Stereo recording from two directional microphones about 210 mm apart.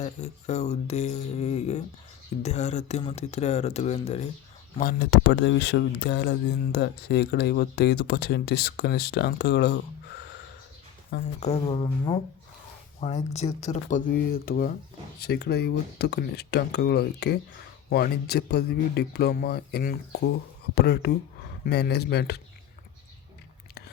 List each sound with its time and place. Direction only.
0.0 s speech: 30° left (ahead or behind)
4.8 s speech: 50° left (ahead or behind)
11.1 s speech: 30° left (ahead or behind); by 22.4 s 50° left (ahead or behind)